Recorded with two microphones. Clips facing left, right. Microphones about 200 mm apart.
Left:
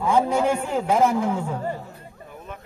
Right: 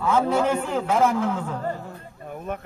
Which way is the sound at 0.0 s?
10° left (ahead or behind).